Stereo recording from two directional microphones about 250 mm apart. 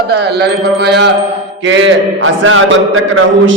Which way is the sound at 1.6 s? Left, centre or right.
Right.